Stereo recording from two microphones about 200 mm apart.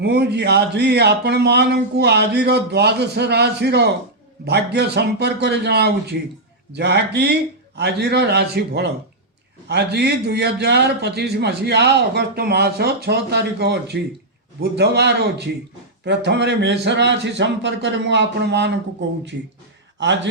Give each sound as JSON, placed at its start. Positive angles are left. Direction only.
{"t": 0.0, "sound": "a man's voice", "side_deg": -55}